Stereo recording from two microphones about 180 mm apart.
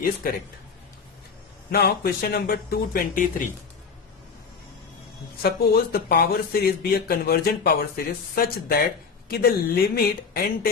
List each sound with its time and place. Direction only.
0.2 s speech: 55° left (ahead or behind)
1.7 s speech: 60° left (ahead or behind)
5.4 s speech: 60° left (ahead or behind)